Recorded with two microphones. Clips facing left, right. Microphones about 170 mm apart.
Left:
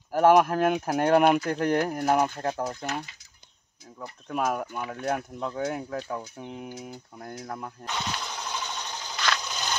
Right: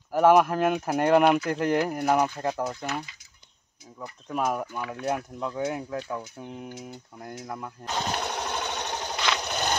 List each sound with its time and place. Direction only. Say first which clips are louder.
0.1 s speech: even; centre (ahead or behind)
4.0 s speech: even; centre (ahead or behind)
4.9 s speech: even; 5° right (ahead or behind)
7.8 s sewing machine: right 6 dB; 40° right (ahead or behind); by 9.1 s 60° right (ahead or behind)
9.5 s a sound: right 5 dB; 60° right (ahead or behind)